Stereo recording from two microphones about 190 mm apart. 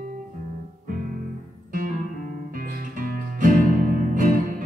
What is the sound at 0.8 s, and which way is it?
Music, 45° right (ahead or behind).